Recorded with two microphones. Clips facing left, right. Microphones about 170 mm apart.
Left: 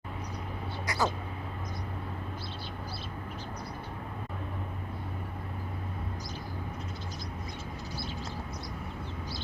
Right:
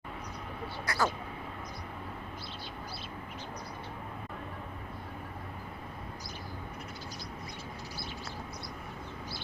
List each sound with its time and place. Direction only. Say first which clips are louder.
0.9 s speech: left 1 dB; 20° left (ahead or behind)